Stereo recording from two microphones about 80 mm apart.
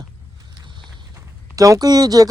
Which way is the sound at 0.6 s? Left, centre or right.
Right.